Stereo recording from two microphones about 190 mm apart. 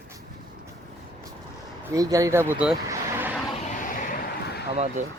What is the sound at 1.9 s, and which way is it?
Speech, 20° right (ahead or behind).